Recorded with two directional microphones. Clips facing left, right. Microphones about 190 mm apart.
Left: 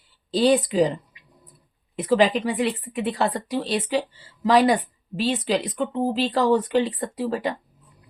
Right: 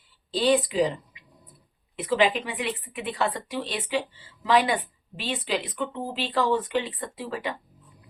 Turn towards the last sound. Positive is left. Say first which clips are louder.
# left 6 dB
turn(degrees=40)  # may be behind; listen again after turning